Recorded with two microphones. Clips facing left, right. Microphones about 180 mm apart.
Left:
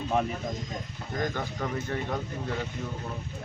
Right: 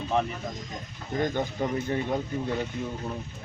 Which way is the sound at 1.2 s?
20° right (ahead or behind).